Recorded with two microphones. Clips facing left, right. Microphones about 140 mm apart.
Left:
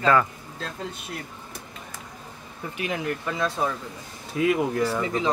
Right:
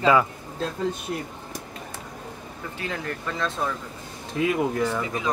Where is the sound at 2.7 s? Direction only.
15° left (ahead or behind).